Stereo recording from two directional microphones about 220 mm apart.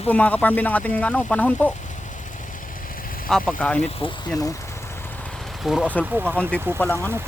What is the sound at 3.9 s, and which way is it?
Speech, 25° left (ahead or behind).